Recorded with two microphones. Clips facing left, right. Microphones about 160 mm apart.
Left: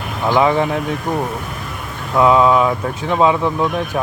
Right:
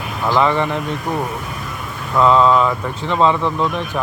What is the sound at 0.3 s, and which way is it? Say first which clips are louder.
Speech: left 2 dB; 15° left (ahead or behind).